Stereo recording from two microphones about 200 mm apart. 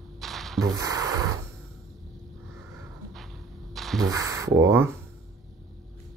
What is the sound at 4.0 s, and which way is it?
Speech, 15° right (ahead or behind).